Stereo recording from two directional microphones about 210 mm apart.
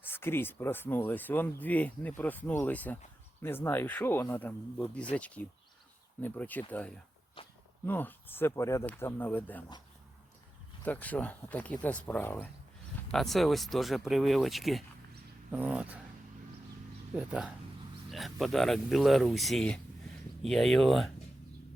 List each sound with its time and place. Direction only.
0.0 s speech: 10° left (ahead or behind)
7.4 s a sound: 25° left (ahead or behind)
7.9 s speech: 10° left (ahead or behind)
10.8 s speech: 5° left (ahead or behind)
17.2 s speech: 5° right (ahead or behind)